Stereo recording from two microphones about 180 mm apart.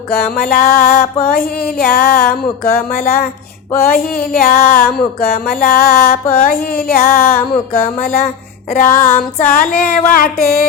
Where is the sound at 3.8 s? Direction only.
55° left (ahead or behind).